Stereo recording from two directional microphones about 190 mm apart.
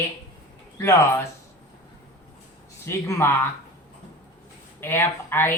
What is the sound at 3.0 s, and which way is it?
Speech, 15° left (ahead or behind).